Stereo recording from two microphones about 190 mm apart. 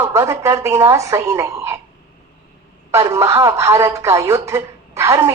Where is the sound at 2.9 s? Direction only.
15° right (ahead or behind).